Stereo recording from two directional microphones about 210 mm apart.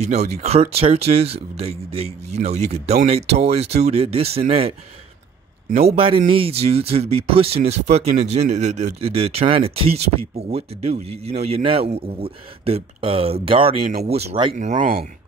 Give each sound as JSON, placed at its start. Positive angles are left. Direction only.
{"t": 0.0, "sound": "speech", "side_deg": -30}